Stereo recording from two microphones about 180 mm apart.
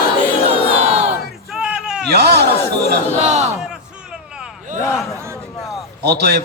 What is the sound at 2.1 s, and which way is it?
Speech, 65° right (ahead or behind).